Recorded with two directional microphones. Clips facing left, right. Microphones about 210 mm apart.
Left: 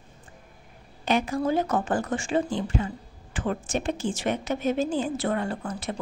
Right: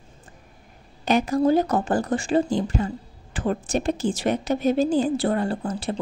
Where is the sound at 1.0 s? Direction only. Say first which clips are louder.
Right 5 dB; 40° right (ahead or behind).